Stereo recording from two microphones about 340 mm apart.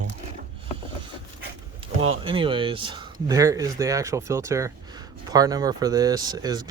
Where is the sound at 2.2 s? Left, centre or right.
Centre.